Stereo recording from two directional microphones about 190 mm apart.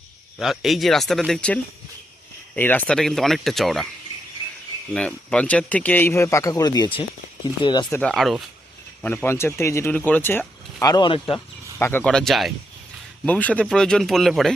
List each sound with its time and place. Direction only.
0.3 s speech: centre (ahead or behind)
2.6 s speech: 10° left (ahead or behind)
4.9 s speech: 5° left (ahead or behind); by 7.9 s 25° left (ahead or behind)
7.9 s speech: 5° left (ahead or behind); by 11.4 s 25° left (ahead or behind)
11.8 s speech: 10° left (ahead or behind)